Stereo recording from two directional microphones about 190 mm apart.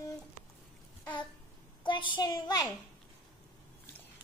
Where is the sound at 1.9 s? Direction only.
25° left (ahead or behind).